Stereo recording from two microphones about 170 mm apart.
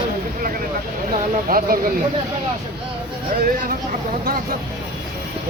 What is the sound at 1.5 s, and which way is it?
Speech, 55° right (ahead or behind).